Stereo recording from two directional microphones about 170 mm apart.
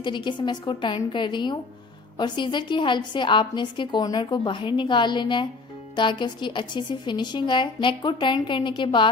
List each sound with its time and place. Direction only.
0.0 s a woman's voice: 25° left (ahead or behind)